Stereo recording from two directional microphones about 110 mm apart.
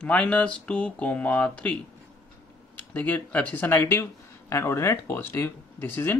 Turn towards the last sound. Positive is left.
turn(degrees=20)  # may be behind; listen again after turning